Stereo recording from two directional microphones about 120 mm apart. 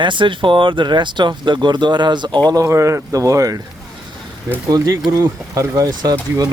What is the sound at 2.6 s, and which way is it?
Speech, 25° right (ahead or behind).